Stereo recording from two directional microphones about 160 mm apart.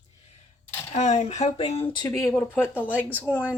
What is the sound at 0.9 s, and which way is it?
Speech, 45° left (ahead or behind).